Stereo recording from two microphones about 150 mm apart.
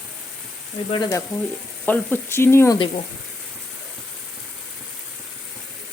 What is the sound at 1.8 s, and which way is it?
Speech, 10° left (ahead or behind).